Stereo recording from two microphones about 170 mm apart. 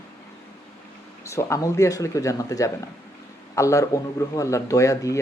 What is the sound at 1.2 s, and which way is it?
Speech, 15° left (ahead or behind).